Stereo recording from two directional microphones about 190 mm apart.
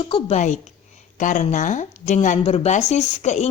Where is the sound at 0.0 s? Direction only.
30° left (ahead or behind).